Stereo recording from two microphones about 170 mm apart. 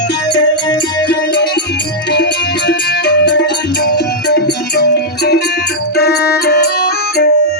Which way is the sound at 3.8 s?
75° left (ahead or behind).